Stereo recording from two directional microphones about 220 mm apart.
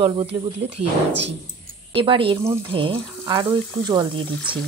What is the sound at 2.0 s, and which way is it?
A woman's voice, 25° right (ahead or behind).